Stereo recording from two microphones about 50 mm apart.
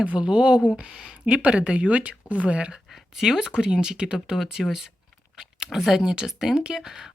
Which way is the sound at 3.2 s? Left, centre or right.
Centre.